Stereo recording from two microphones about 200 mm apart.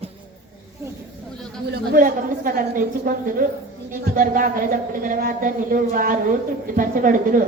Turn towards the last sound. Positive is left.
turn(degrees=-45)  # may be behind; listen again after turning